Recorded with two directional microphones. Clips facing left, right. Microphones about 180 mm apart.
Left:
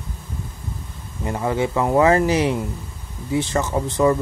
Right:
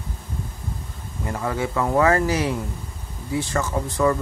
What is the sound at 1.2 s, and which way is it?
Speech, 20° left (ahead or behind).